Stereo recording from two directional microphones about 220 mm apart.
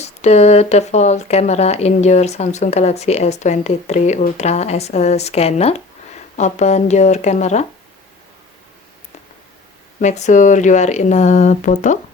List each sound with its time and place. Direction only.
0.0 s speech: 30° left (ahead or behind)
10.0 s speech: 30° left (ahead or behind)